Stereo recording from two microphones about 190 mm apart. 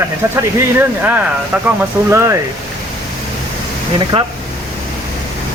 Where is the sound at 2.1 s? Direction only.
15° right (ahead or behind).